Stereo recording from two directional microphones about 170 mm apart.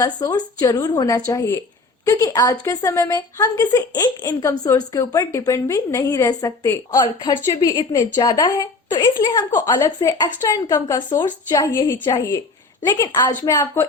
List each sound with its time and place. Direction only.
0.0 s a woman's voice: 20° left (ahead or behind)